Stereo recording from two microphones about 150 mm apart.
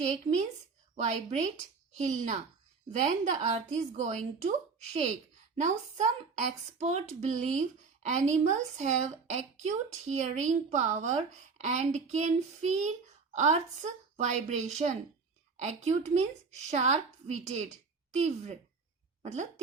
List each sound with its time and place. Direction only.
0.0 s a woman's voice: 55° right (ahead or behind)